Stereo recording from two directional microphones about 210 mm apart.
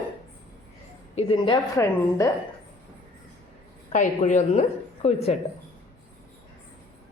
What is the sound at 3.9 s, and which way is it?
A woman's voice, 35° left (ahead or behind).